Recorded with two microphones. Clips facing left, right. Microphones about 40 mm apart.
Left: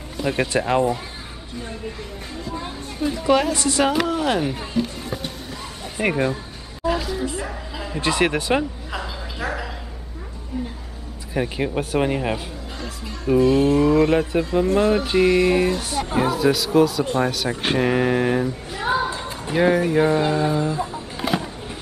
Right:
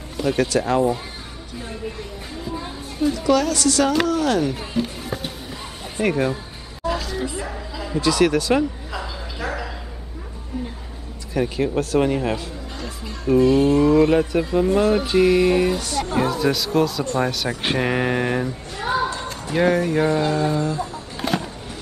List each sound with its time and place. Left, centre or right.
0.4 s speech: left
3.1 s speech: left
4.6 s speech: centre
5.9 s speech: centre
6.9 s music: centre
7.7 s a sound: centre
8.0 s speech: left
8.9 s a sound: centre
11.3 s speech: centre
12.8 s speech: centre
18.8 s a sound: centre
19.5 s speech: centre; by 21.0 s left
21.2 s a sound: centre